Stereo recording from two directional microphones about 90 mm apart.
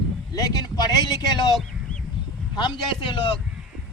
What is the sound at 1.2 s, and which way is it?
Speech, 50° left (ahead or behind).